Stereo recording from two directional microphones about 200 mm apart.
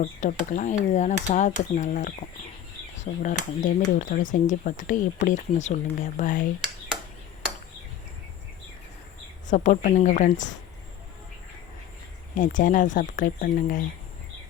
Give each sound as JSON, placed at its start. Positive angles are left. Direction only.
{"t": 0.0, "sound": "speech", "side_deg": 40}
{"t": 9.5, "sound": "speech", "side_deg": 40}
{"t": 12.3, "sound": "speech", "side_deg": 40}